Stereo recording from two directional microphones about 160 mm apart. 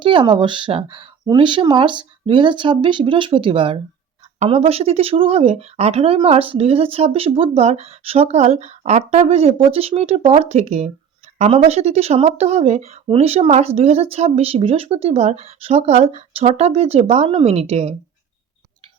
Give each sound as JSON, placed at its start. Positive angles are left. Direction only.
{"t": 0.0, "sound": "speech", "side_deg": -30}